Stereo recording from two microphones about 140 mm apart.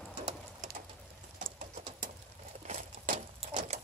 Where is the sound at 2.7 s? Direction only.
60° right (ahead or behind).